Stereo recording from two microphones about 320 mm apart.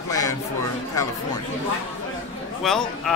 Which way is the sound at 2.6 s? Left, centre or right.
Centre.